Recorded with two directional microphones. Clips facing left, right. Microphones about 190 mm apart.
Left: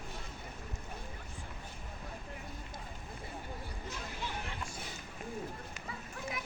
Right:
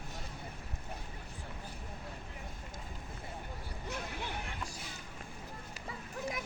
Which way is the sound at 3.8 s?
60° right (ahead or behind).